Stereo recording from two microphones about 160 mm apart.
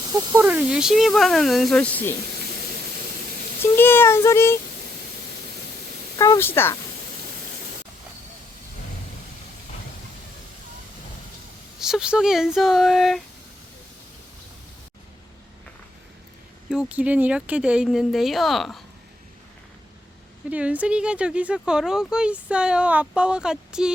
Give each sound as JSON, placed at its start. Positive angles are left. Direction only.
{"t": 0.1, "sound": "speech", "side_deg": -20}
{"t": 0.4, "sound": "speech", "side_deg": -10}
{"t": 3.6, "sound": "a child's voice", "side_deg": 15}
{"t": 6.1, "sound": "a child's voice", "side_deg": 20}
{"t": 11.8, "sound": "speech", "side_deg": -5}
{"t": 16.6, "sound": "speech", "side_deg": -5}
{"t": 20.5, "sound": "speech", "side_deg": -10}